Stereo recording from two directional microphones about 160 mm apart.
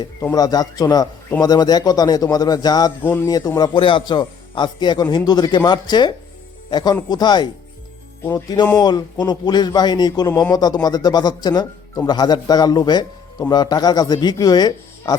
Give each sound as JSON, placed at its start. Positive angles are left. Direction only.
{"t": 0.0, "sound": "a man's voice", "side_deg": 20}
{"t": 3.0, "sound": "a man's voice", "side_deg": 15}